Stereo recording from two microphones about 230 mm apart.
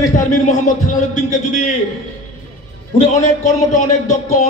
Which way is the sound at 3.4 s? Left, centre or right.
Left.